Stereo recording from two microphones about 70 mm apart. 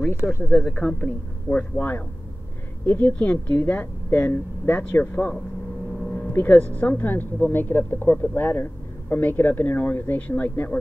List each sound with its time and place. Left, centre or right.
0.0 s speech: left
0.7 s speech: centre
1.8 s speech: left
6.3 s speech: left